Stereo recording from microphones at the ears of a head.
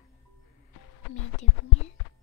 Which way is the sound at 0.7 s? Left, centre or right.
Left.